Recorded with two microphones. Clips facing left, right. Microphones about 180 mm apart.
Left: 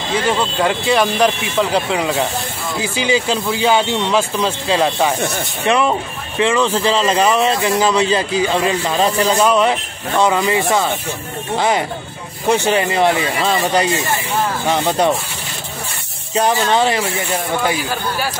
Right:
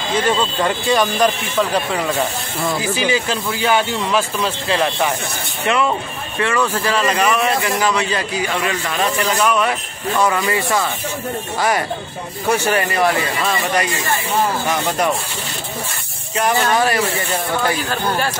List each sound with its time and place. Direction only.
0.3 s speech: 10° left (ahead or behind); by 15.1 s 30° left (ahead or behind)
16.3 s speech: 25° left (ahead or behind)